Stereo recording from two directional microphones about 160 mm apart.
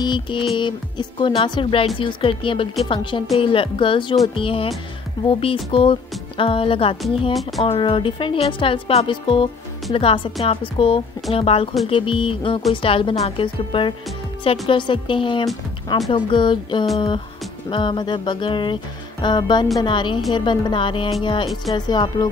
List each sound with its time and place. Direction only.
0.0 s music: 30° left (ahead or behind)
0.6 s speech: 30° left (ahead or behind)
17.6 s music: 30° left (ahead or behind)
20.3 s speech: 30° left (ahead or behind)
21.2 s music: 30° left (ahead or behind)